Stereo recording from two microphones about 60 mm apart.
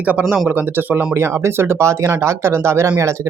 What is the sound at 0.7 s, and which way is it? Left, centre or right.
Speech, right.